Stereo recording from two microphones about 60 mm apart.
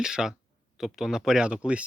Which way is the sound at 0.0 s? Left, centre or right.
Centre.